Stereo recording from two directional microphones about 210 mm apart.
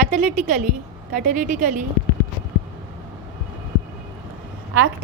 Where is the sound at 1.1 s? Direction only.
40° right (ahead or behind).